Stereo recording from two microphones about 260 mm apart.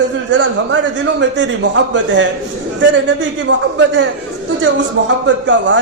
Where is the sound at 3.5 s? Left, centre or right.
Right.